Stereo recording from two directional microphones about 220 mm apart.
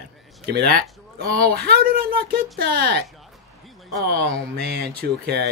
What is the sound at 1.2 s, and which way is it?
Speech, 40° right (ahead or behind).